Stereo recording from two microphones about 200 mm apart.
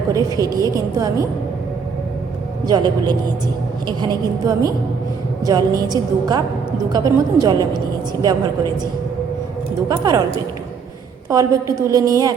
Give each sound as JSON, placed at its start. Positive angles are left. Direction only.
{"t": 0.1, "sound": "a woman's voice", "side_deg": -15}
{"t": 2.6, "sound": "a woman's voice", "side_deg": -20}
{"t": 9.9, "sound": "a woman's voice", "side_deg": -20}
{"t": 11.3, "sound": "a woman's voice", "side_deg": -15}